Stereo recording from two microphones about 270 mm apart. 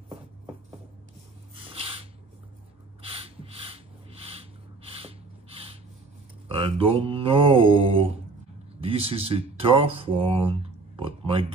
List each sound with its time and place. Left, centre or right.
1.5 s snort: right
3.0 s a sound: right
4.9 s mechanisms: right
6.5 s mantra: right
9.3 s speech: right